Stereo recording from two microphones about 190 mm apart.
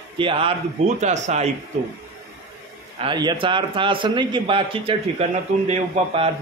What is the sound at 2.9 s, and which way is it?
A man's voice, 25° right (ahead or behind).